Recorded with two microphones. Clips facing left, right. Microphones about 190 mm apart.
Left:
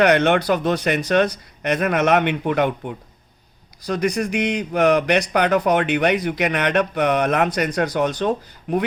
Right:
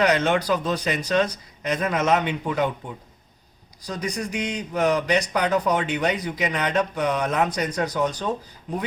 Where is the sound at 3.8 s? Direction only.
70° left (ahead or behind).